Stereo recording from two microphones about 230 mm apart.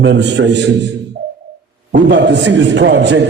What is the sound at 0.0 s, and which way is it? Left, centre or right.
Speech, right.